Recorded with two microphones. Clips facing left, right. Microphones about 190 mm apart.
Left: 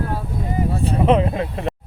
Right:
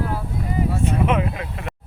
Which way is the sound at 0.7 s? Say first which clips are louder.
Left 5 dB; 35° left (ahead or behind).